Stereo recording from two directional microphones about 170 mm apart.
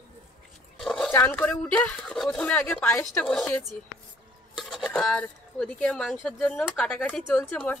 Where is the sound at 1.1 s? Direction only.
10° left (ahead or behind).